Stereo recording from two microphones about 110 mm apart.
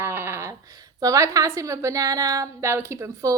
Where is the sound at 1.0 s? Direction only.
30° right (ahead or behind).